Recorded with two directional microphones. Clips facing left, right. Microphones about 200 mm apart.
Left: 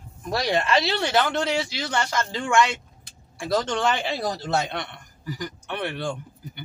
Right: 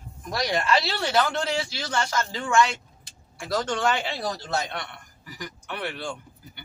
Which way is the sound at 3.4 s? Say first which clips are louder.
Left 2 dB; 25° left (ahead or behind).